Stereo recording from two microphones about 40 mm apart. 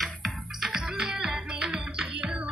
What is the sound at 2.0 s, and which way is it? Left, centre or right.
Music, right.